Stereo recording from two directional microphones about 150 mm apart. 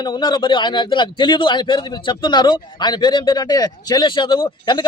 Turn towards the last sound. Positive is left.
turn(degrees=30)  # may be behind; listen again after turning